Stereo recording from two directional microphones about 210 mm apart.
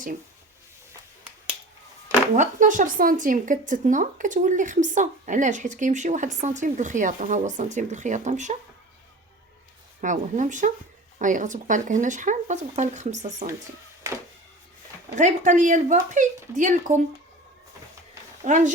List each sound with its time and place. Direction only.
2.3 s speech: 35° right (ahead or behind)
10.0 s speech: 35° right (ahead or behind)
15.1 s speech: 35° right (ahead or behind)
18.4 s speech: 35° right (ahead or behind)